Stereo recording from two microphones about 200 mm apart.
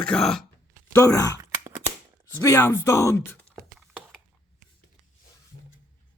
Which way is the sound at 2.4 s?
15° left (ahead or behind).